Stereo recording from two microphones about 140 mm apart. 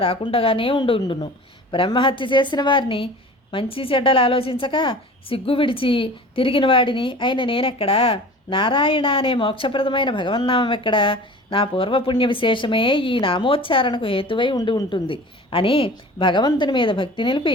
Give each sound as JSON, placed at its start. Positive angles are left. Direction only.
{"t": 0.0, "sound": "a woman's voice", "side_deg": 40}